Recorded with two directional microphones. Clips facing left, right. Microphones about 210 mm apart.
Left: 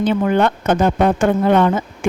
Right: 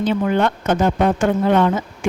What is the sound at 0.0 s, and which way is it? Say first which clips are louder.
Speech: left 2 dB; 55° left (ahead or behind).